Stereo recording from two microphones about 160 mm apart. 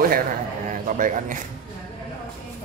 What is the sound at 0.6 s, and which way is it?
Speech, 55° right (ahead or behind).